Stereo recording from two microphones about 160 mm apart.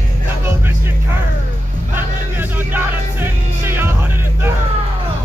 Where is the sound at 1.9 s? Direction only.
10° right (ahead or behind).